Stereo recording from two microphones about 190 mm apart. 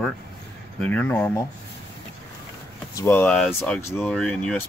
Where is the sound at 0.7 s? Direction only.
10° left (ahead or behind).